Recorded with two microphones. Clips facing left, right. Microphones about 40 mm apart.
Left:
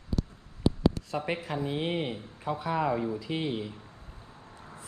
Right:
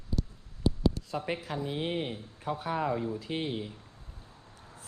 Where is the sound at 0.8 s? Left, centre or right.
Left.